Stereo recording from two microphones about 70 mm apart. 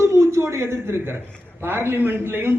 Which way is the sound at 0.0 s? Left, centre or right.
Right.